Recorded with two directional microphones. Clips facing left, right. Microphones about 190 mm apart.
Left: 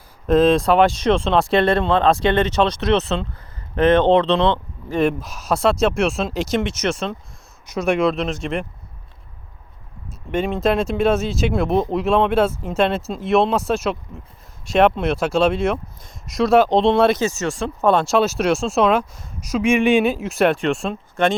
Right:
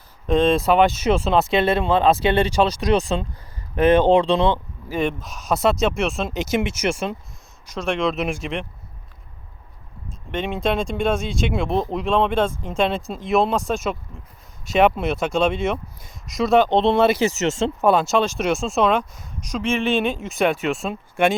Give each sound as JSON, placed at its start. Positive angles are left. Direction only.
{"t": 0.3, "sound": "speech", "side_deg": 0}
{"t": 7.7, "sound": "speech", "side_deg": 10}
{"t": 8.1, "sound": "speech", "side_deg": -5}
{"t": 10.3, "sound": "speech", "side_deg": 0}
{"t": 17.2, "sound": "speech", "side_deg": -15}
{"t": 17.8, "sound": "speech", "side_deg": 0}